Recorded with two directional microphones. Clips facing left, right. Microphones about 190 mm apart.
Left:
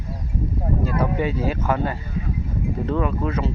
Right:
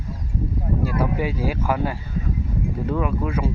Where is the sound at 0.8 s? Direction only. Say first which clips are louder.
Left 1 dB; 10° right (ahead or behind).